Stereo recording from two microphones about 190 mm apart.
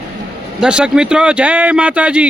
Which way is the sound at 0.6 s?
5° right (ahead or behind).